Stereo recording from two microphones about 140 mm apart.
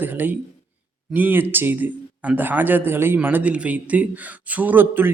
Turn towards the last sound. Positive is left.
turn(degrees=-15)  # may be behind; listen again after turning